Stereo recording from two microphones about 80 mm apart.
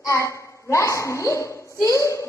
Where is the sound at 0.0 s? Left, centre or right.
Left.